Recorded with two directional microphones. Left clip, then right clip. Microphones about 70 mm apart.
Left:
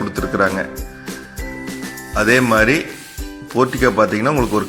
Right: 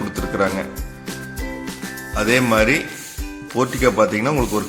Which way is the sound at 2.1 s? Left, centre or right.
Left.